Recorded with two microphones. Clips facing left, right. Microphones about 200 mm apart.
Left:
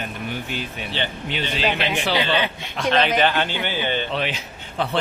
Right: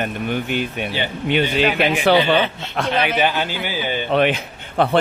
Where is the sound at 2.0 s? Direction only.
55° right (ahead or behind).